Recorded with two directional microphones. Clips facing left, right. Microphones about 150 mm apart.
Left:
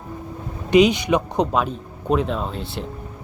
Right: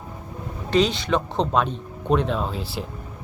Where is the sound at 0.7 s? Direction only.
15° left (ahead or behind).